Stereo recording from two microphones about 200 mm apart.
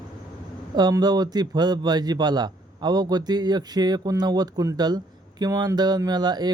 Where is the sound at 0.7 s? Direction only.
20° right (ahead or behind).